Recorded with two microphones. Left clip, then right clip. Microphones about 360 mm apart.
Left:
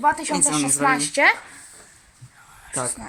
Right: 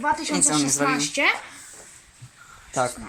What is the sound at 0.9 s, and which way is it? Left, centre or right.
Speech, centre.